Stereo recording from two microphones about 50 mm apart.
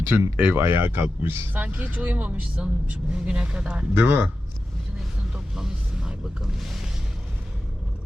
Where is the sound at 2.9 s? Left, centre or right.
Right.